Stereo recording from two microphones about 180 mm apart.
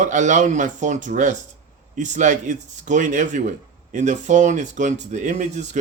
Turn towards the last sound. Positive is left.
turn(degrees=-40)  # may be behind; listen again after turning